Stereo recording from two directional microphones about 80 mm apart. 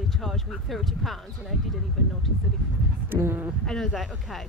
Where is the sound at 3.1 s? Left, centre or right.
Right.